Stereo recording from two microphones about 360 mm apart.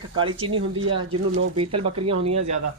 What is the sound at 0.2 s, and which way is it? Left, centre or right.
Speech, centre.